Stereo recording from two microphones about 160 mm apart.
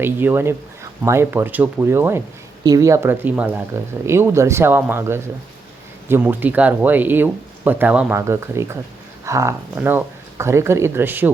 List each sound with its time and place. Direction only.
0.0 s speech: 15° right (ahead or behind)